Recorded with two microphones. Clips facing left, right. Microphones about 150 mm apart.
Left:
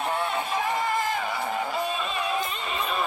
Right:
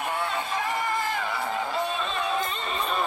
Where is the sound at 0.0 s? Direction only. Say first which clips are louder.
Left 2 dB; 20° left (ahead or behind).